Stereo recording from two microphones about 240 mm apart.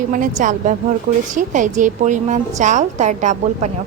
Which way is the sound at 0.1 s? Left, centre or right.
Right.